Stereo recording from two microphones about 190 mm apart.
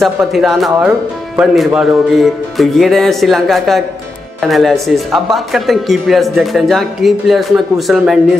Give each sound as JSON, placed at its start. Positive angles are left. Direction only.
{"t": 0.0, "sound": "speech", "side_deg": 0}